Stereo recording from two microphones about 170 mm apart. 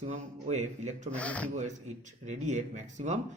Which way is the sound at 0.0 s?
45° right (ahead or behind).